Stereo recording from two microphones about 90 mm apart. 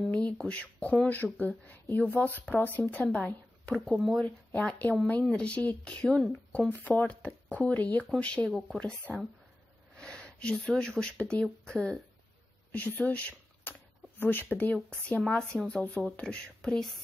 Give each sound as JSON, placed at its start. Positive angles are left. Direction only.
{"t": 0.5, "sound": "speech", "side_deg": 15}
{"t": 3.9, "sound": "speech", "side_deg": 0}
{"t": 4.5, "sound": "speech", "side_deg": 15}